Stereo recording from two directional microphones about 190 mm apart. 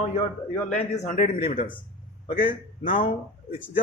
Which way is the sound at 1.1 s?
40° left (ahead or behind).